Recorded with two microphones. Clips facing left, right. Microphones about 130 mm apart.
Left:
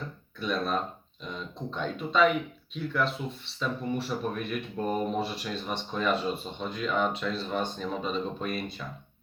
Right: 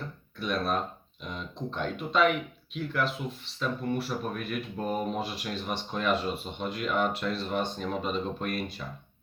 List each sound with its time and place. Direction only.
0.3 s speech: centre (ahead or behind)
1.8 s speech: centre (ahead or behind)